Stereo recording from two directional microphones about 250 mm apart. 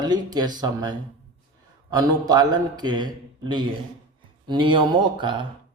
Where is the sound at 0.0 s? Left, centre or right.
Centre.